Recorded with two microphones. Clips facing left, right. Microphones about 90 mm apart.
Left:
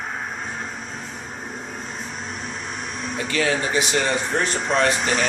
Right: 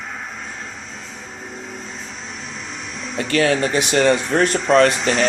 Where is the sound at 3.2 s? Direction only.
55° right (ahead or behind).